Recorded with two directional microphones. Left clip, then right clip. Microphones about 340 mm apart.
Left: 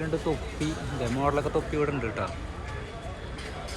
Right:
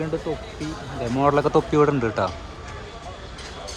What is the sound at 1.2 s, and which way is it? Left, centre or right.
Speech, right.